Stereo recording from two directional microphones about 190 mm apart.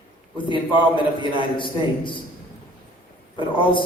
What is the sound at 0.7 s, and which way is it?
A man's voice, 25° left (ahead or behind).